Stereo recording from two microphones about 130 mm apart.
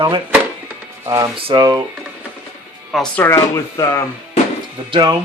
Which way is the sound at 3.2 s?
20° left (ahead or behind).